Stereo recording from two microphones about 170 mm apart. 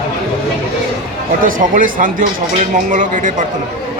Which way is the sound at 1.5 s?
55° right (ahead or behind).